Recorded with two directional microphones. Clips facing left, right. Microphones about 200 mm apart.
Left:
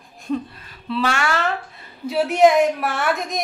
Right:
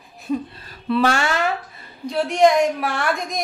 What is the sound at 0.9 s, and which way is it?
Speech, 45° right (ahead or behind).